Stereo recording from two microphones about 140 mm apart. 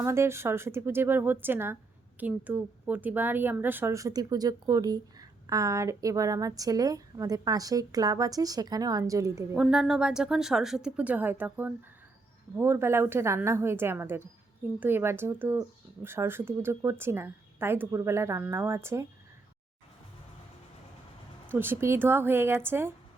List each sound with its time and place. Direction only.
0.0 s a woman's voice: 20° right (ahead or behind)
9.6 s a woman's voice: 5° right (ahead or behind)
21.5 s a woman's voice: 15° right (ahead or behind)